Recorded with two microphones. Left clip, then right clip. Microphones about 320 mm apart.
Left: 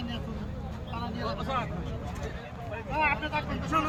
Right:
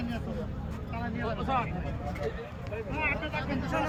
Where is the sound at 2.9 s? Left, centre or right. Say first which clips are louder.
Left 4 dB; centre.